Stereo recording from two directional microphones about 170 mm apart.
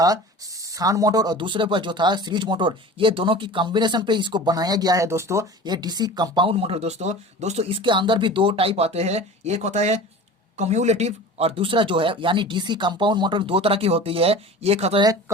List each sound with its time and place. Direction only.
0.6 s speech: 20° right (ahead or behind); by 15.0 s 40° right (ahead or behind)